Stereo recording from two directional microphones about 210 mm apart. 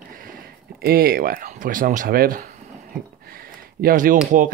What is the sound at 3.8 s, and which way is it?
Speech, 45° right (ahead or behind).